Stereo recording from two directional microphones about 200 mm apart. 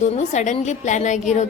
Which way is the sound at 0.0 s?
35° left (ahead or behind).